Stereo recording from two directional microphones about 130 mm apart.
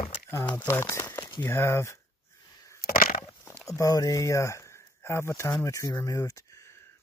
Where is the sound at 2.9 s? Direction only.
90° left.